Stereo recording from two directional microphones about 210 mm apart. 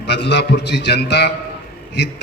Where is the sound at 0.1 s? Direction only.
55° left (ahead or behind).